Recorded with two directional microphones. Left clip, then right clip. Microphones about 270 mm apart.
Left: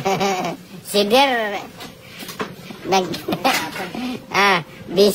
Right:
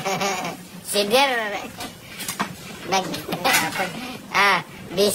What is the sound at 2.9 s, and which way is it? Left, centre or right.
Speech, centre.